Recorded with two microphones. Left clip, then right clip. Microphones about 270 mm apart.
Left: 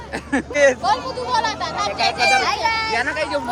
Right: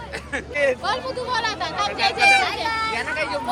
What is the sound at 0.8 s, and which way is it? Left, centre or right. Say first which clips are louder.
Speech: left 4 dB; right.